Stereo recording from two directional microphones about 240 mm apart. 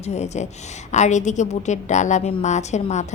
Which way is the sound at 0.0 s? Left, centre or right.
Left.